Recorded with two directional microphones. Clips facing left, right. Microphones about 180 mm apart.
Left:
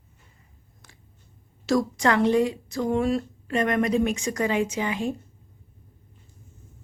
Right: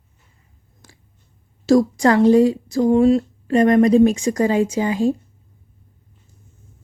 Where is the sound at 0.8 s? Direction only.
35° right (ahead or behind).